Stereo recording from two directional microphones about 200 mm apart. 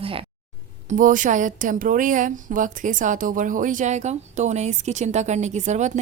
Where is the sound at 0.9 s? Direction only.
40° right (ahead or behind).